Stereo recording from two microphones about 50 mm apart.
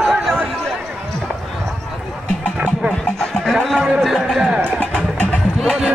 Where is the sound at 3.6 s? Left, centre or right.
Centre.